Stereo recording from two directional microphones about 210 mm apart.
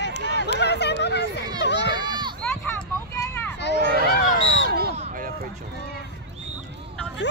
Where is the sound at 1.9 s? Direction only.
20° right (ahead or behind).